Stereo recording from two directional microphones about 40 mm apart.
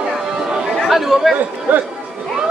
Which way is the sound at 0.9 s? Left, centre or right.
Centre.